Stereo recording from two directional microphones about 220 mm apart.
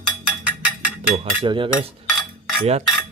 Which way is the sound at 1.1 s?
35° right (ahead or behind).